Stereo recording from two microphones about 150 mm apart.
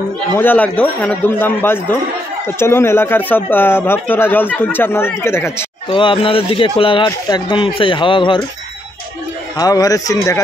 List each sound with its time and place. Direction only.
0.4 s speech: 10° left (ahead or behind)
5.9 s speech: 35° left (ahead or behind)
9.6 s a man's voice: 25° left (ahead or behind)